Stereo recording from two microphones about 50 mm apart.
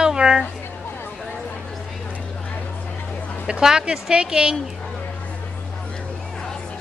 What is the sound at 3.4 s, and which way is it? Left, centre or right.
Speech, centre.